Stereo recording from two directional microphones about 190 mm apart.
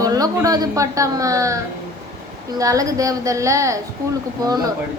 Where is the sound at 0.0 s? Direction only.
20° right (ahead or behind).